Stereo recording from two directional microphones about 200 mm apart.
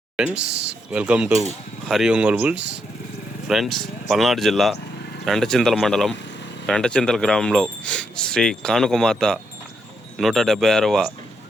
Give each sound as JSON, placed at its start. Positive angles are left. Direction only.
{"t": 0.9, "sound": "speech", "side_deg": -5}
{"t": 2.6, "sound": "speech", "side_deg": -60}
{"t": 3.4, "sound": "speech", "side_deg": 0}